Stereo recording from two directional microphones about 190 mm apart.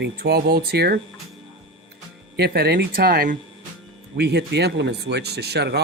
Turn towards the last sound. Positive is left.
turn(degrees=-60)  # may be behind; listen again after turning